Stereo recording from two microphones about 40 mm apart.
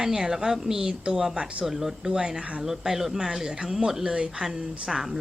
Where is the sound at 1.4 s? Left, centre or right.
Right.